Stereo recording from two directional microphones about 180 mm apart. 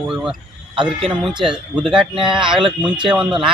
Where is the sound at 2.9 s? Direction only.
25° right (ahead or behind).